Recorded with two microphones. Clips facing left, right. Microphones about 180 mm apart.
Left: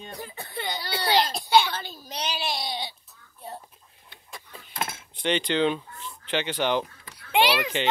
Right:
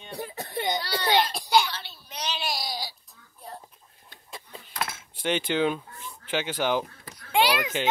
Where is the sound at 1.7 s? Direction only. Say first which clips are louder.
Left 6 dB; 45° left (ahead or behind).